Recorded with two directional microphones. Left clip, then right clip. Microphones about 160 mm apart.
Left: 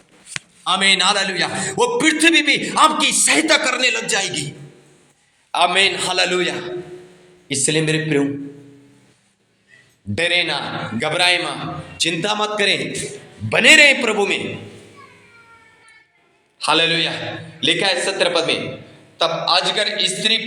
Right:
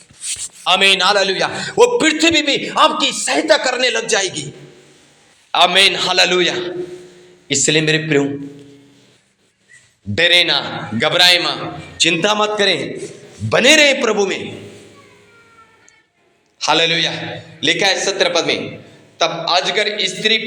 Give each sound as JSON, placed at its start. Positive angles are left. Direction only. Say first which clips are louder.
{"t": 0.8, "sound": "a man's voice", "louder": "right 2 dB", "side_deg": -5}
{"t": 2.2, "sound": "a man's voice", "louder": "even", "side_deg": 0}
{"t": 3.6, "sound": "a man's voice", "louder": "right 2 dB", "side_deg": 0}
{"t": 4.1, "sound": "a man's voice", "louder": "right 3 dB", "side_deg": -20}
{"t": 5.5, "sound": "a man's voice", "louder": "right 4 dB", "side_deg": -10}
{"t": 7.4, "sound": "a man's voice", "louder": "right 4 dB", "side_deg": -15}
{"t": 10.2, "sound": "a man's voice", "louder": "right 6 dB", "side_deg": -15}
{"t": 16.6, "sound": "a man's voice", "louder": "right 2 dB", "side_deg": -20}